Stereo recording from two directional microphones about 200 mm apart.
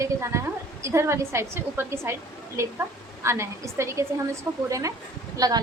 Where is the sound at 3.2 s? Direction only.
15° right (ahead or behind).